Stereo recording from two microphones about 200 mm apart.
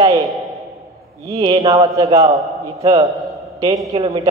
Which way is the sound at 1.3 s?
25° right (ahead or behind).